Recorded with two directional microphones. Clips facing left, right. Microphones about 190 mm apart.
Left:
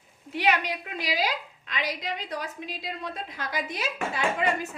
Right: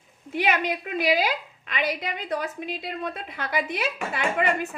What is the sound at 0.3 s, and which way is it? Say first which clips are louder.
A woman's voice: right 2 dB; 50° right (ahead or behind).